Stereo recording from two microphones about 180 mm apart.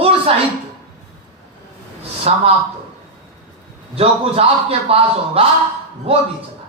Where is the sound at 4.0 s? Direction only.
35° right (ahead or behind).